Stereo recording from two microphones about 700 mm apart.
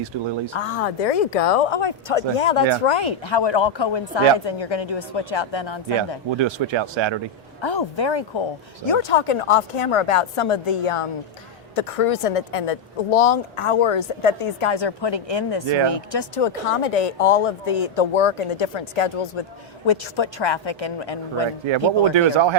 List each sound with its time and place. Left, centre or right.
0.5 s a woman's voice: left
6.3 s speech: right
7.6 s a woman's voice: left
22.1 s speech: right